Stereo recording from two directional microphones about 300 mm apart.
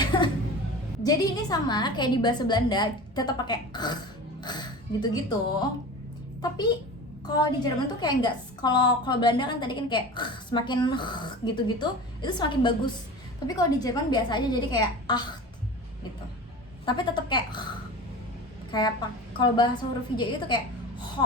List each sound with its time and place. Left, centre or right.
0.0 s a sound: centre
1.0 s a woman's voice: centre
16.8 s a woman's voice: centre